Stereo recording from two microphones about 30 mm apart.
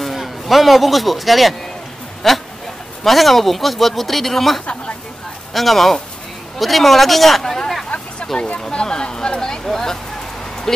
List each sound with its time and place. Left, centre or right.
0.0 s a man's voice: centre
8.3 s speech: left
9.5 s vehicle: centre